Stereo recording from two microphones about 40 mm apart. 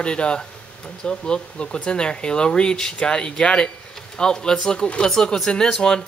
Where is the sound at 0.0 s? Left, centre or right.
Left.